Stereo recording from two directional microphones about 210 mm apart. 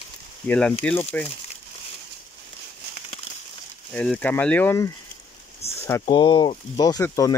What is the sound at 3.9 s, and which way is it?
Speech, 5° left (ahead or behind).